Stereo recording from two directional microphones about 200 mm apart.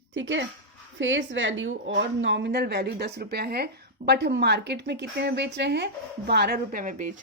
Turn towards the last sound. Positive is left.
turn(degrees=-40)  # may be behind; listen again after turning